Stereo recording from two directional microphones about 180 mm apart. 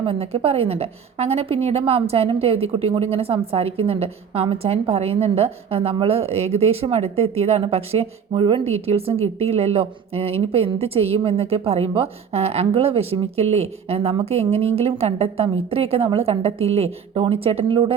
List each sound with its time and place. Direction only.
0.0 s a woman's voice: 30° right (ahead or behind)